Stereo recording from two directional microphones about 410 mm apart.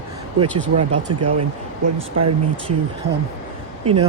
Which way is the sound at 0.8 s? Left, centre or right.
Right.